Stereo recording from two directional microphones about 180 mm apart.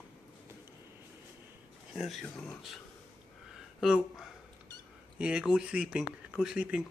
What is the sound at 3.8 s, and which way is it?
Speech, centre (ahead or behind).